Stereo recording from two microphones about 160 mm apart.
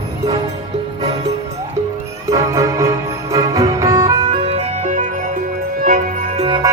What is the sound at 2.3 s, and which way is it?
Music, 20° right (ahead or behind).